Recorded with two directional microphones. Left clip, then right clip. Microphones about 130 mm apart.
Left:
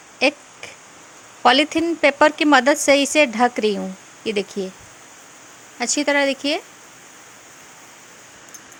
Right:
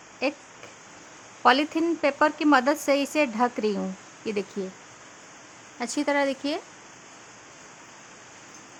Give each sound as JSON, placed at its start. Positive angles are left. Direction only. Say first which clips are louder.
{"t": 0.2, "sound": "a sound", "louder": "left 9 dB", "side_deg": 20}
{"t": 1.4, "sound": "a woman's voice", "louder": "left 5 dB", "side_deg": 15}
{"t": 5.8, "sound": "a woman's voice", "louder": "left 6 dB", "side_deg": 10}